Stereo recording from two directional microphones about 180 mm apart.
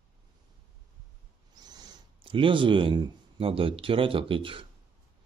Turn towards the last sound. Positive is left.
turn(degrees=-30)  # may be behind; listen again after turning